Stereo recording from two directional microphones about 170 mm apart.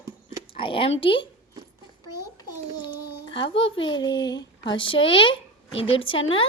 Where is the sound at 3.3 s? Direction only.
30° left (ahead or behind).